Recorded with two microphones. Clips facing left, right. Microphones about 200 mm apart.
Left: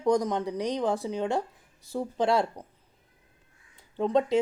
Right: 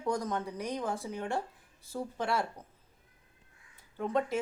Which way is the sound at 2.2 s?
90° left.